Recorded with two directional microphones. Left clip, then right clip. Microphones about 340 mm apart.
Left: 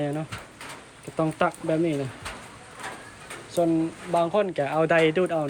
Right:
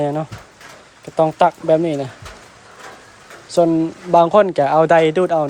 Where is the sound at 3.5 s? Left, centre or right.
Centre.